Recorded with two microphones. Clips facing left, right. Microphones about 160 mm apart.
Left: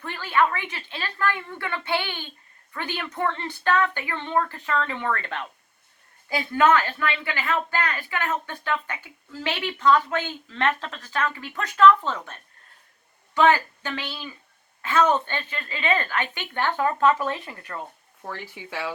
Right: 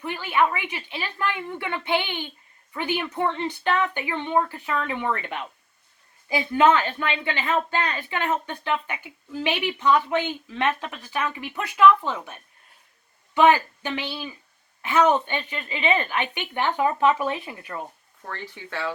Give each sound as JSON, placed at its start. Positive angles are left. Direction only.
{"t": 0.0, "sound": "a woman's voice", "side_deg": -15}
{"t": 18.3, "sound": "speech", "side_deg": 10}